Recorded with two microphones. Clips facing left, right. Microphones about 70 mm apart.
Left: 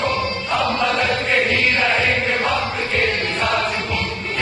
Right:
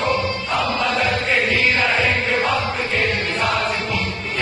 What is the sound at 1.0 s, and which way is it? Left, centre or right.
Chant, centre.